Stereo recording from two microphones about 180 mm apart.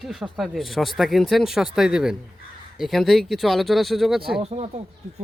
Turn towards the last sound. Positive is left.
turn(degrees=-35)  # may be behind; listen again after turning